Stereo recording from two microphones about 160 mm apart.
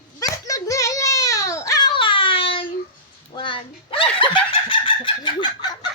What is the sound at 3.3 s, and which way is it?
Speech, 30° left (ahead or behind).